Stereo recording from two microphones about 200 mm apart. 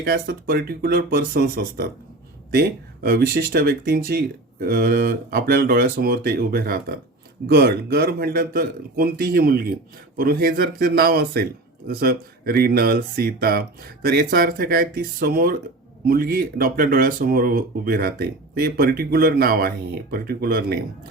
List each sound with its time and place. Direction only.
0.0 s speech: 50° right (ahead or behind)